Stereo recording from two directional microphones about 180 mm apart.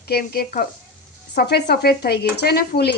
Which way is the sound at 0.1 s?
55° left (ahead or behind).